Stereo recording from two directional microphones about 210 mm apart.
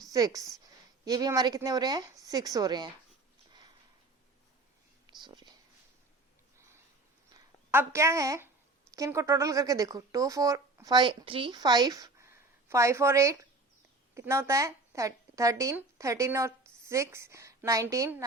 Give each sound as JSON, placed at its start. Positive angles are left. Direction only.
{"t": 0.1, "sound": "a woman's voice", "side_deg": -15}
{"t": 5.2, "sound": "speech", "side_deg": -20}
{"t": 7.3, "sound": "speech", "side_deg": -10}